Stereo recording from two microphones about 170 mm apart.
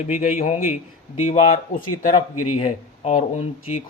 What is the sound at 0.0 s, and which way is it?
Speech, 45° left (ahead or behind).